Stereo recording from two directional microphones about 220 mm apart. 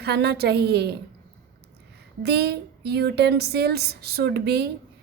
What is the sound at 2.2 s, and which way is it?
A woman's voice, 50° right (ahead or behind).